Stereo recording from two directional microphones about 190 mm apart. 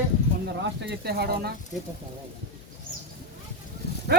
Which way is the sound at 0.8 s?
60° right (ahead or behind).